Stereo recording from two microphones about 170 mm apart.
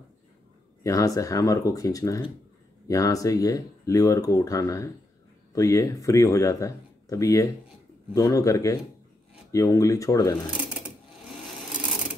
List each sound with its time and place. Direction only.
0.8 s speech: 20° left (ahead or behind)